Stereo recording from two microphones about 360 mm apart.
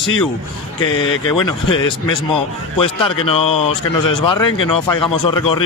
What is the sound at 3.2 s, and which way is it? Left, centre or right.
A man's voice, centre.